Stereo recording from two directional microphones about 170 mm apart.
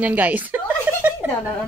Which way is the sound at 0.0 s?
10° right (ahead or behind).